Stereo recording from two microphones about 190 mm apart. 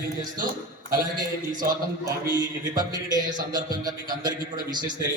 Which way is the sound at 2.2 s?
20° right (ahead or behind).